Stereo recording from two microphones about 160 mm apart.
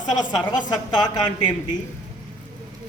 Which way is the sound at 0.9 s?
25° left (ahead or behind).